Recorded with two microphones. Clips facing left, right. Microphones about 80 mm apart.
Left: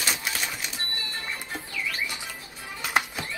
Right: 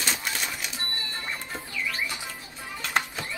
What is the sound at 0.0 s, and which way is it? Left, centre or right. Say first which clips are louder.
Typewriter: even; centre.